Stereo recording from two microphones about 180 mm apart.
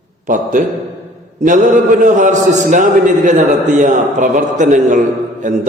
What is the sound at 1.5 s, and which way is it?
A man's voice, 45° right (ahead or behind).